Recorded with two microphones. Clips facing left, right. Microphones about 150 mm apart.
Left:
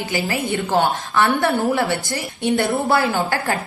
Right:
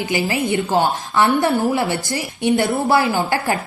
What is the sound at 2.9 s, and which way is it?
Speech, 15° right (ahead or behind).